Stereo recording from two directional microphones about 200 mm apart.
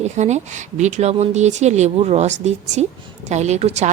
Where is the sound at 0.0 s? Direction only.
35° right (ahead or behind).